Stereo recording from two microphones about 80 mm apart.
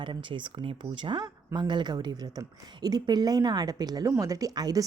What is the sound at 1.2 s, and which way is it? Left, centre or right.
A woman's voice, right.